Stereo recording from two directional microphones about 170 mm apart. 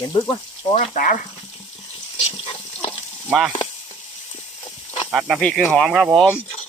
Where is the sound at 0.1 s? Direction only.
30° left (ahead or behind).